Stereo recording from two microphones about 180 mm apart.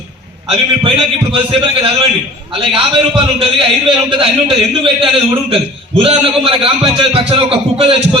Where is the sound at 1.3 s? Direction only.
30° right (ahead or behind).